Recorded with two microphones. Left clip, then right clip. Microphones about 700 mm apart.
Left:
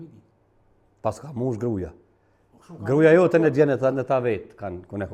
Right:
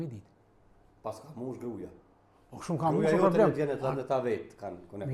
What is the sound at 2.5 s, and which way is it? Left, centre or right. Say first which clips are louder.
Speech: right 11 dB; right.